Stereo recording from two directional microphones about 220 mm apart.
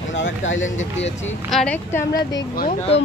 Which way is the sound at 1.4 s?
5° left (ahead or behind).